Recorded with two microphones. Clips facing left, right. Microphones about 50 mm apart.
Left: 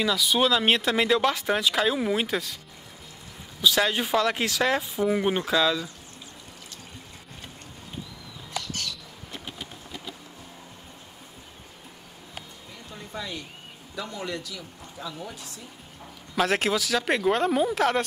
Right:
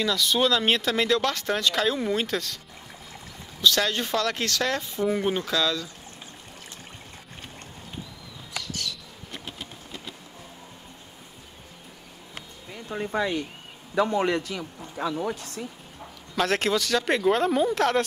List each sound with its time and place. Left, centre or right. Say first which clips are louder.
0.0 s speech: even; centre
3.6 s speech: even; centre
12.9 s speech: right 10 dB; right
16.3 s speech: even; centre